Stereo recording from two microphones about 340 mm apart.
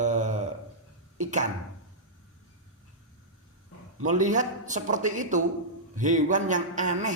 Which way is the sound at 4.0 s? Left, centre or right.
Right.